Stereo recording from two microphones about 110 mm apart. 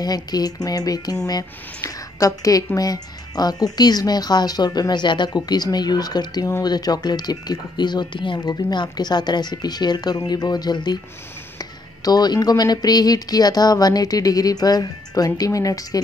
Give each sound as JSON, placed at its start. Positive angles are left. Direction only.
{"t": 0.0, "sound": "speech", "side_deg": 35}